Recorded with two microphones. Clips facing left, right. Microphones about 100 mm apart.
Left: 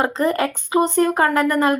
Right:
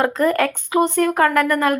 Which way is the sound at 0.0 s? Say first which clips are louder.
Right 2 dB; 25° left (ahead or behind).